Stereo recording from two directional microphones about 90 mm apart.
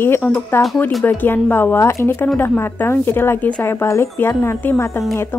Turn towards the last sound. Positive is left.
turn(degrees=25)  # may be behind; listen again after turning